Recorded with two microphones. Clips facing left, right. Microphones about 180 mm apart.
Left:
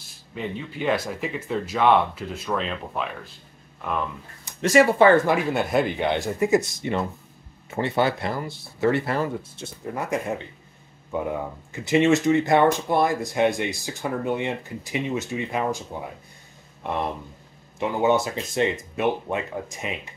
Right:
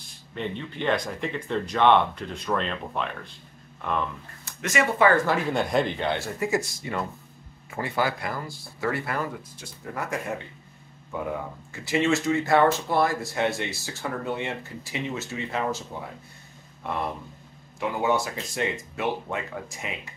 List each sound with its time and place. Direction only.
0.0 s speech: 5° left (ahead or behind)
4.6 s speech: 30° left (ahead or behind)
5.5 s speech: 5° left (ahead or behind); by 19.9 s 20° left (ahead or behind)